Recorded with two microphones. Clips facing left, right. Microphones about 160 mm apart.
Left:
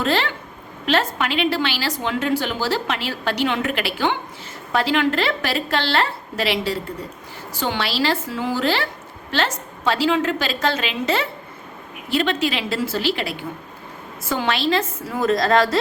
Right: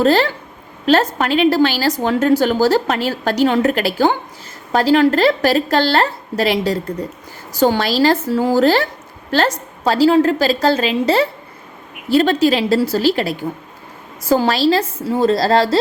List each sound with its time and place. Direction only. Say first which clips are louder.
0.0 s a woman's voice: right 8 dB; 40° right (ahead or behind)